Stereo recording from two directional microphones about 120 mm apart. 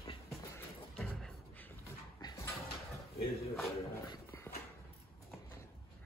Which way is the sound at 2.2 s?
25° left (ahead or behind).